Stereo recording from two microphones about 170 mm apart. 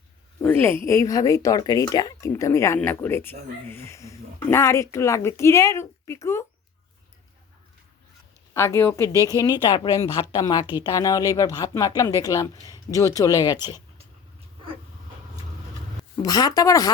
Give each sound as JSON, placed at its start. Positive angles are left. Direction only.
{"t": 0.4, "sound": "speech", "side_deg": 15}
{"t": 8.5, "sound": "speech", "side_deg": 15}
{"t": 16.1, "sound": "speech", "side_deg": 25}